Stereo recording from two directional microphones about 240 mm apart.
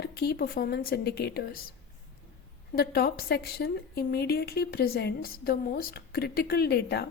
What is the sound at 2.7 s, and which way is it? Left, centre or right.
A woman's voice, left.